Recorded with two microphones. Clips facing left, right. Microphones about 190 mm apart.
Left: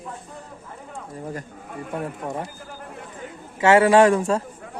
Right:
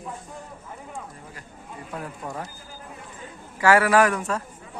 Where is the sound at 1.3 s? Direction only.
55° left (ahead or behind).